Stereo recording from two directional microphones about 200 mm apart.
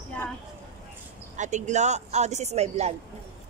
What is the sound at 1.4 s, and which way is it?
Speech, 35° right (ahead or behind).